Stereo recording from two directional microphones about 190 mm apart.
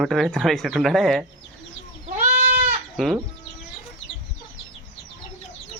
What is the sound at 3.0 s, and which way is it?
Speech, centre (ahead or behind).